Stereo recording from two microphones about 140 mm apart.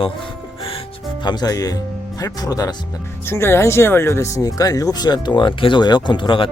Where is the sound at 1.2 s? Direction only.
30° left (ahead or behind).